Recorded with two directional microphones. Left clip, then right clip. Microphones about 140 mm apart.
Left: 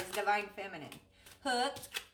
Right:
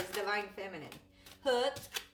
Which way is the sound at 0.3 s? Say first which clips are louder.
Left 3 dB; 25° left (ahead or behind).